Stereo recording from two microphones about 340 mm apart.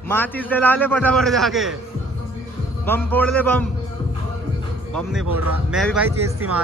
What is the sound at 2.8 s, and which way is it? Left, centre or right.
Speech, centre.